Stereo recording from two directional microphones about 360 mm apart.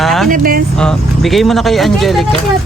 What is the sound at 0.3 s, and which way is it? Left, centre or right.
Vehicle, right.